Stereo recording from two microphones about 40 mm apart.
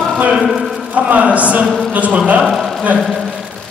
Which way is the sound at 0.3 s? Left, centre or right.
Centre.